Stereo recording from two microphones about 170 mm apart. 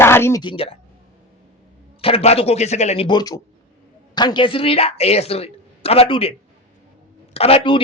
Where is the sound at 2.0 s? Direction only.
35° left (ahead or behind).